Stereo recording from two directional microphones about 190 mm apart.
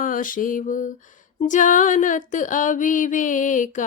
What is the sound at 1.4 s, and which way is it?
Music, 40° left (ahead or behind).